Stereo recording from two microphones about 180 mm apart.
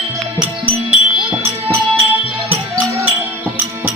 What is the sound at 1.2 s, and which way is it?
Music, 5° right (ahead or behind).